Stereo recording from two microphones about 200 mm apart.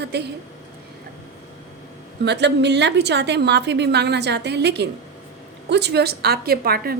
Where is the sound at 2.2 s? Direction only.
60° right (ahead or behind).